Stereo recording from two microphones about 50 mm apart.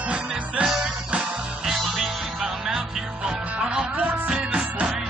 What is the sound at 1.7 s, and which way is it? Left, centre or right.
Music, centre.